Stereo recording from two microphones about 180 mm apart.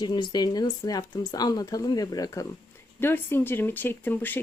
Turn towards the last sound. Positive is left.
turn(degrees=10)  # may be behind; listen again after turning